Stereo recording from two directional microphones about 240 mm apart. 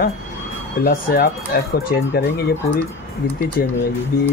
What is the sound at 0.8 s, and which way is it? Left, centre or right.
Speech, left.